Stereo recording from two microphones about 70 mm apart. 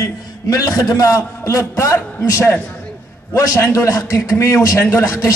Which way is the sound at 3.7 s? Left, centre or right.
Left.